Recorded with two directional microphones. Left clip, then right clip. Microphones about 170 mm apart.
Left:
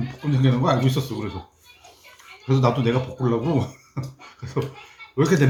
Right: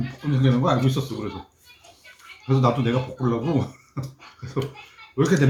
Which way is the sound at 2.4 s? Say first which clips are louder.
Left 1 dB; 30° left (ahead or behind).